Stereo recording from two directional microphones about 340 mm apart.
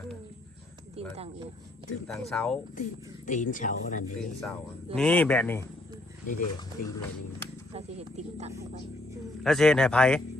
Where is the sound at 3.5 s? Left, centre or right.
Left.